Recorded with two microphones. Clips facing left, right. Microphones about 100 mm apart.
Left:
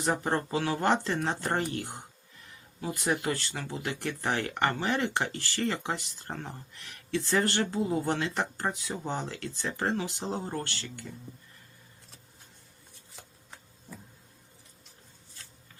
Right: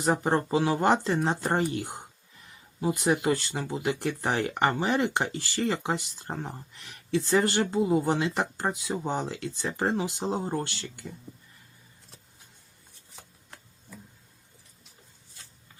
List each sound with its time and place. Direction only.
0.0 s speech: 20° right (ahead or behind)